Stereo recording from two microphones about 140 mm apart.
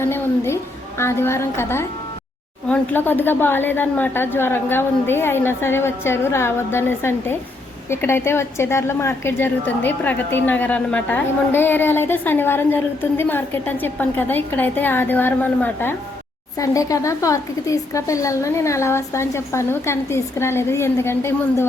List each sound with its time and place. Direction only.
0.0 s a woman's voice: 20° left (ahead or behind)